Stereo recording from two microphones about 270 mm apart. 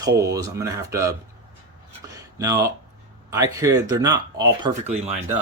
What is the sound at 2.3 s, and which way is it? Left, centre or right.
Speech, centre.